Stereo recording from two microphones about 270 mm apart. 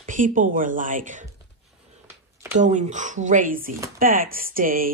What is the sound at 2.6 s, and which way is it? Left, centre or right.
Speech, right.